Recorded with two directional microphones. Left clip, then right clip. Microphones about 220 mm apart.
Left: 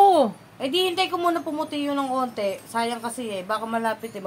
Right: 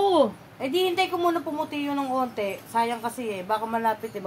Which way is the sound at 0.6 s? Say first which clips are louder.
Left 1 dB; 10° left (ahead or behind).